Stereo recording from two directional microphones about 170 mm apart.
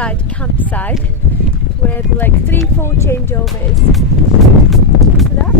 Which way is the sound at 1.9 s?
10° left (ahead or behind).